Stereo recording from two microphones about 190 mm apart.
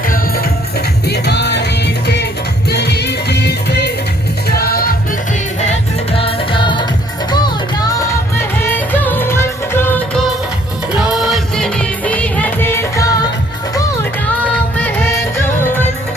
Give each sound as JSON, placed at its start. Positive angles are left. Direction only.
{"t": 1.0, "sound": "music", "side_deg": 60}
{"t": 5.5, "sound": "music", "side_deg": 35}
{"t": 10.9, "sound": "music", "side_deg": 0}
{"t": 14.8, "sound": "music", "side_deg": 10}